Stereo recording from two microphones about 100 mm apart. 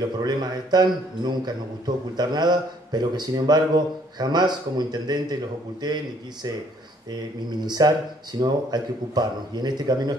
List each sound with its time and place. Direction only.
0.2 s speech: 45° right (ahead or behind)
7.6 s speech: 45° right (ahead or behind)